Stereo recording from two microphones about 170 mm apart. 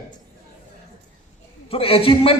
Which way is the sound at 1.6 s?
35° left (ahead or behind).